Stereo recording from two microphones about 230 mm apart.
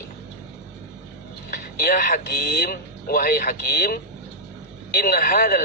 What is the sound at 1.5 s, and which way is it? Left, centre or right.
Speech, left.